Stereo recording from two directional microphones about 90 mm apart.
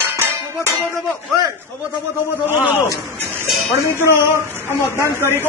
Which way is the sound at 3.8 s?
30° left (ahead or behind).